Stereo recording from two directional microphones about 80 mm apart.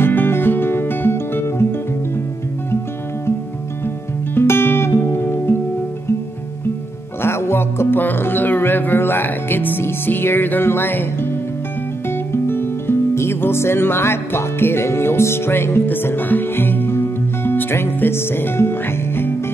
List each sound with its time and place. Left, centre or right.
0.0 s music: left
4.4 s music: left
7.2 s music: left
12.3 s music: left